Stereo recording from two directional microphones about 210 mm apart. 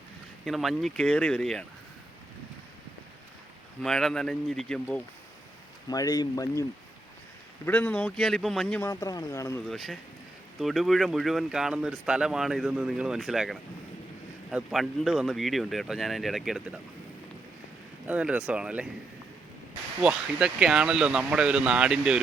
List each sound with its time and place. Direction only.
0.4 s speech: centre (ahead or behind)
3.8 s speech: centre (ahead or behind)
5.9 s speech: 15° left (ahead or behind)
9.6 s speech: centre (ahead or behind)
18.0 s speech: 5° right (ahead or behind)
20.0 s speech: 5° right (ahead or behind)